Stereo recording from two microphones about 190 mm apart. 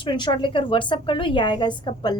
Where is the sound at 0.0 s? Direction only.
25° left (ahead or behind).